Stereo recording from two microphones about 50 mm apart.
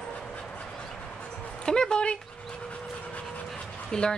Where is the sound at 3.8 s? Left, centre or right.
Centre.